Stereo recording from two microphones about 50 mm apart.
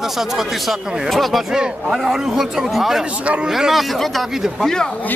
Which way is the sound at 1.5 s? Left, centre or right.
Centre.